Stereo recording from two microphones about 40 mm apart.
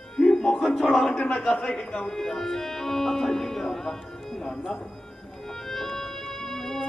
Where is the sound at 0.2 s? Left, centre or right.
Centre.